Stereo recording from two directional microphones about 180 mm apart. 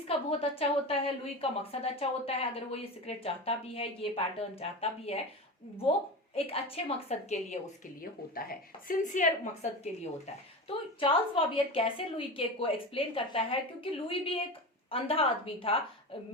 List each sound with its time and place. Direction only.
0.1 s a woman's voice: 30° left (ahead or behind)
6.3 s a woman's voice: 30° left (ahead or behind)
8.4 s a woman's voice: 50° left (ahead or behind); by 15.8 s 30° left (ahead or behind)